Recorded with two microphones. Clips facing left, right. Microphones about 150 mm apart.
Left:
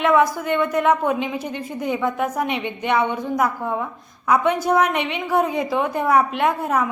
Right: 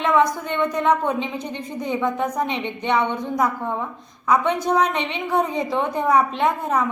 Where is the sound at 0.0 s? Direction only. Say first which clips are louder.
Left 2 dB; 5° left (ahead or behind).